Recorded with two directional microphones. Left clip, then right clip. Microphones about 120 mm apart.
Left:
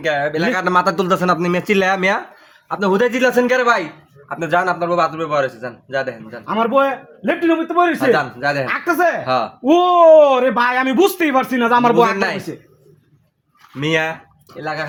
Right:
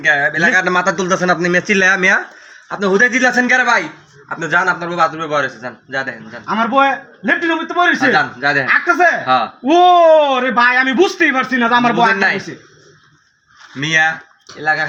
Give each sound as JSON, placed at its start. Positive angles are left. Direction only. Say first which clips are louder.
{"t": 0.0, "sound": "a man's voice", "louder": "right 5 dB", "side_deg": 45}
{"t": 10.0, "sound": "a man's voice", "louder": "left 1 dB", "side_deg": 40}
{"t": 13.7, "sound": "speech", "louder": "right 5 dB", "side_deg": 55}